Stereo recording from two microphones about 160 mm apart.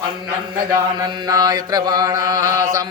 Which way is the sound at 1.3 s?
25° right (ahead or behind).